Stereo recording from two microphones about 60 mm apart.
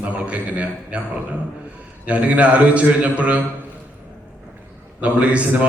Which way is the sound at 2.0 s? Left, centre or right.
Right.